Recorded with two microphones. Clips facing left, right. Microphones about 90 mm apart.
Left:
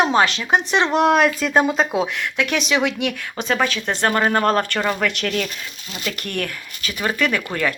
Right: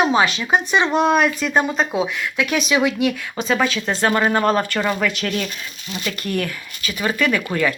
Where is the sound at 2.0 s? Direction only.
60° left (ahead or behind).